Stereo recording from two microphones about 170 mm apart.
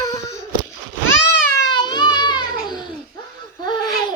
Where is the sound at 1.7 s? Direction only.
25° left (ahead or behind).